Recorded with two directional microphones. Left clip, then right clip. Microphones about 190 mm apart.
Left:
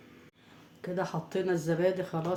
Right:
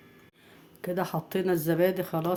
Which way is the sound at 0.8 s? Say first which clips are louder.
Right 3 dB; 50° right (ahead or behind).